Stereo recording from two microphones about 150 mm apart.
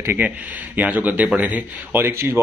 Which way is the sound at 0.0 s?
15° right (ahead or behind).